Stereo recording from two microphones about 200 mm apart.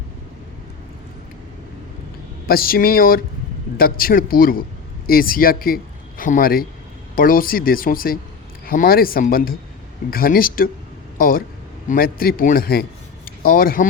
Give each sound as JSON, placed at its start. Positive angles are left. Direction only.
{"t": 2.5, "sound": "speech", "side_deg": 50}